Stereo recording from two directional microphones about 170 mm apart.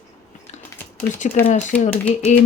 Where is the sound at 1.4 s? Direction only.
15° left (ahead or behind).